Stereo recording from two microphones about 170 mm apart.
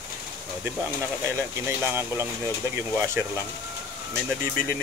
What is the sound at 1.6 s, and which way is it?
Speech, 15° right (ahead or behind).